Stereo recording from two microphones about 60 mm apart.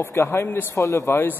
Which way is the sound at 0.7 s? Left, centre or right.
Left.